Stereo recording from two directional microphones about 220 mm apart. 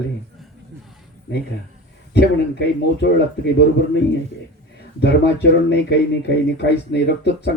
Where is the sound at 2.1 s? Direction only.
50° left (ahead or behind).